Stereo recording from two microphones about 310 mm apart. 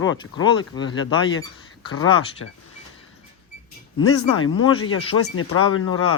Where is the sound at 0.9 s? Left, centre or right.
Left.